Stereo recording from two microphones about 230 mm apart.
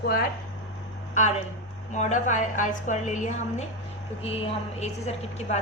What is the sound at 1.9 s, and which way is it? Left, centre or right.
A woman's voice, left.